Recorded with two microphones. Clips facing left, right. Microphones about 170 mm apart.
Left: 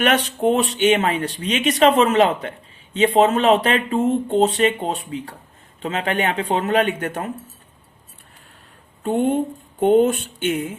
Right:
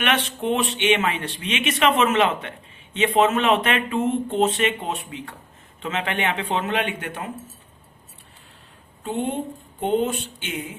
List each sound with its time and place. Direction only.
0.0 s speech: 40° left (ahead or behind)
9.0 s speech: 50° left (ahead or behind)